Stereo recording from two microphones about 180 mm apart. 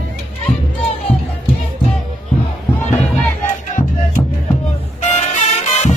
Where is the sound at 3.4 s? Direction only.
45° left (ahead or behind).